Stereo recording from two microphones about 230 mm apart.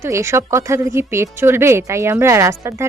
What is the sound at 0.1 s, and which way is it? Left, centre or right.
Speech, centre.